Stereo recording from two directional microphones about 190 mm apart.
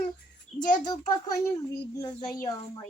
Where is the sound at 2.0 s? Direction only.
20° left (ahead or behind).